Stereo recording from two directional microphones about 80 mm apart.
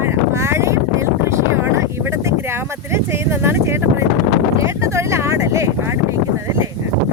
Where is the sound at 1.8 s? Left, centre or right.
Right.